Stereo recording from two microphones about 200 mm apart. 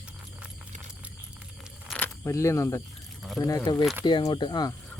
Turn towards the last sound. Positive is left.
turn(degrees=20)  # may be behind; listen again after turning